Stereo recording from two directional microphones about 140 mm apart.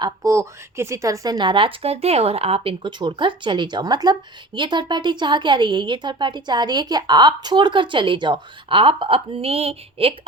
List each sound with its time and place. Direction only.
0.0 s speech: 25° right (ahead or behind); by 10.2 s 45° right (ahead or behind)